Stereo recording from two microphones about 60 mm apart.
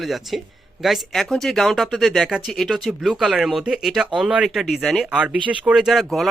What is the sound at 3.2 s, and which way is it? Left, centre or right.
Speech, centre.